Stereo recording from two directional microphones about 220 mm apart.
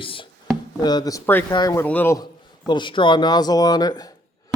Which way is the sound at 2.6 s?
20° left (ahead or behind).